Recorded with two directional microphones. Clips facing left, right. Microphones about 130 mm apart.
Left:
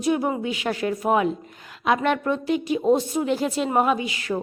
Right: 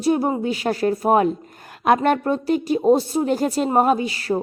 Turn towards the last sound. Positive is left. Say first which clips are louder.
# right 4 dB
turn(degrees=-40)  # may be behind; listen again after turning